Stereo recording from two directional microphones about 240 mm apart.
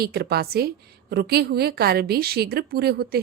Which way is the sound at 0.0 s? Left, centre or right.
Right.